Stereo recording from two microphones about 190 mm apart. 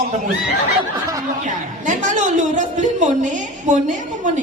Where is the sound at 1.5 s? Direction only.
40° right (ahead or behind).